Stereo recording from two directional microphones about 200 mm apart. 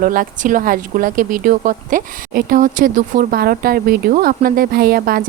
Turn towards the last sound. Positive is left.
turn(degrees=-50)  # may be behind; listen again after turning